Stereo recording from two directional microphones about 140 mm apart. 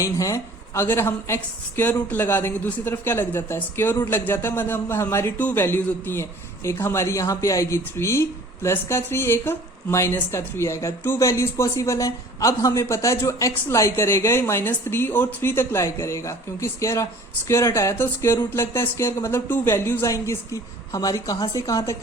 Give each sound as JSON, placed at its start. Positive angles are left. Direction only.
{"t": 0.0, "sound": "a woman's voice", "side_deg": 20}